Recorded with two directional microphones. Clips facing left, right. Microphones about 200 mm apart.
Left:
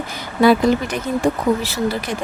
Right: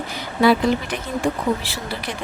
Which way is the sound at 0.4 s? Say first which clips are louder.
Left 3 dB; 45° left (ahead or behind).